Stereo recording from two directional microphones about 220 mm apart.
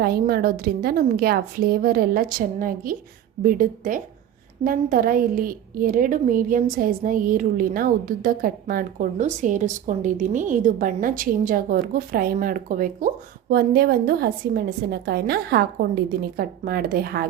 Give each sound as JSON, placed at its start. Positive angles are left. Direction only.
{"t": 0.0, "sound": "a woman's voice", "side_deg": -45}